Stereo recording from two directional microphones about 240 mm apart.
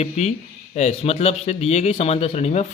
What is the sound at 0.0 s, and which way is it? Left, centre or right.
A man's voice, left.